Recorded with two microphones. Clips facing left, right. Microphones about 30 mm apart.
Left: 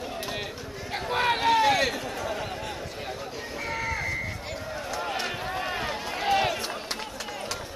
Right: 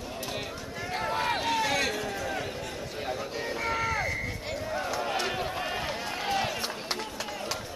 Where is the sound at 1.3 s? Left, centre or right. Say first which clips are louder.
Left 9 dB; left.